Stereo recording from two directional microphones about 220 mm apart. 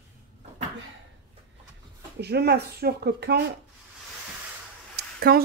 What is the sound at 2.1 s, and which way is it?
A woman's voice, 50° right (ahead or behind).